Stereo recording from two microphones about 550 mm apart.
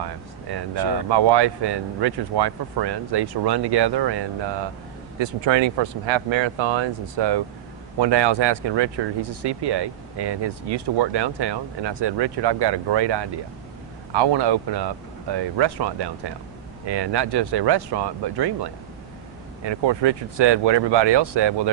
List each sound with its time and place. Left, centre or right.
0.0 s speech: right